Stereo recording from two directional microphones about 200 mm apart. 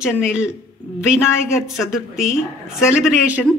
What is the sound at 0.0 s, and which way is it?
Speech, 5° right (ahead or behind).